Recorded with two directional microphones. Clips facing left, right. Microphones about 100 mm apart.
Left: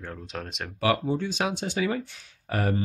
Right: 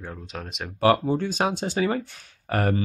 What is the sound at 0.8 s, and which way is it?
Speech, 45° right (ahead or behind).